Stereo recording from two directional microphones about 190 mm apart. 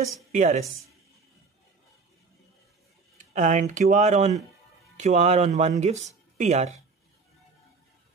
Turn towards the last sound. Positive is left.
turn(degrees=-35)  # may be behind; listen again after turning